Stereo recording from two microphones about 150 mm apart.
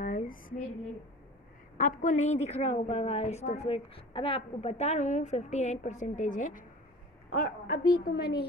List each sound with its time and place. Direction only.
0.0 s a sound: 60° left (ahead or behind)
1.8 s a woman's voice: 65° left (ahead or behind)
7.3 s a woman's voice: 75° left (ahead or behind)